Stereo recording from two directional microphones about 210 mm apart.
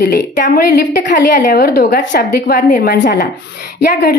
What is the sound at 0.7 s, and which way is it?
A woman's voice, 50° left (ahead or behind).